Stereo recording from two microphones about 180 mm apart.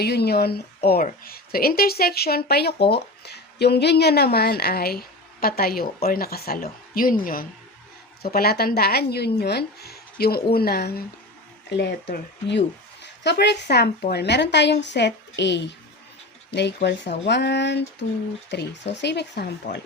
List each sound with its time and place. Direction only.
0.0 s a woman's voice: 65° left (ahead or behind)